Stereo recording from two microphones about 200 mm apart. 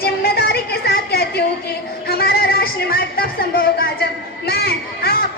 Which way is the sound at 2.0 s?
50° left (ahead or behind).